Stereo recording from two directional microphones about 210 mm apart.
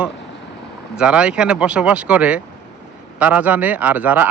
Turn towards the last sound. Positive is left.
turn(degrees=-10)  # may be behind; listen again after turning